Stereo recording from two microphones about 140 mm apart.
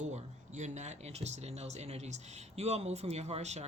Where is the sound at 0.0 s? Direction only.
55° right (ahead or behind).